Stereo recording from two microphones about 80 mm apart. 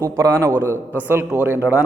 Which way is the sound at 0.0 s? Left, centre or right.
Right.